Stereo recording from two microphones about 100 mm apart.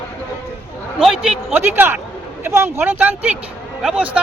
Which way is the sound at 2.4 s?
25° right (ahead or behind).